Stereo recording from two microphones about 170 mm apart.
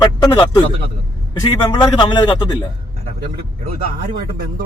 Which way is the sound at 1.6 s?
25° left (ahead or behind).